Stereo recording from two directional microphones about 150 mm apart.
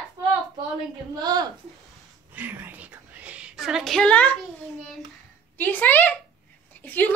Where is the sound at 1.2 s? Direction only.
25° right (ahead or behind).